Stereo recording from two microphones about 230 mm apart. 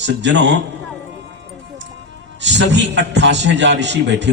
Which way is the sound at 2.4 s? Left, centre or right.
Right.